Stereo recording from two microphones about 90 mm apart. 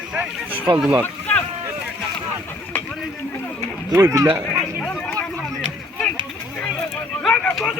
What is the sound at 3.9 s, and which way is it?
Speech, 35° right (ahead or behind).